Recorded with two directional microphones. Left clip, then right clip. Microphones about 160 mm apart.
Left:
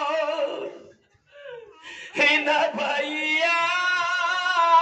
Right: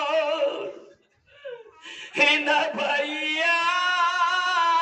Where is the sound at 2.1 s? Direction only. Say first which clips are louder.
Even; 30° right (ahead or behind).